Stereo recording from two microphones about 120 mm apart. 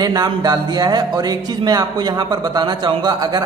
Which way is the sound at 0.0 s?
35° right (ahead or behind).